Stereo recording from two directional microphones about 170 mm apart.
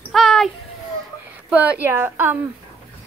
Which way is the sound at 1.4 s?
10° right (ahead or behind).